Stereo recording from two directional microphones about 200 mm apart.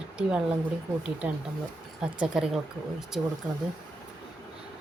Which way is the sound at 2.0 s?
5° right (ahead or behind).